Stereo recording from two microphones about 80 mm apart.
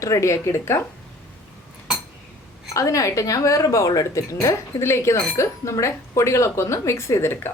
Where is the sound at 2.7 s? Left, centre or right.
Left.